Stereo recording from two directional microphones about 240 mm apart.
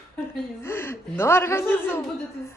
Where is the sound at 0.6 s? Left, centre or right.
Centre.